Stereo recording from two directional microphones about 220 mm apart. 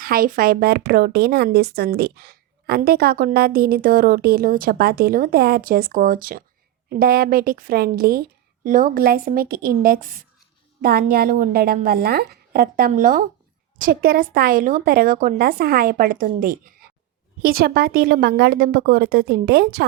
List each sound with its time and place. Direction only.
0.0 s a woman's voice: 40° right (ahead or behind)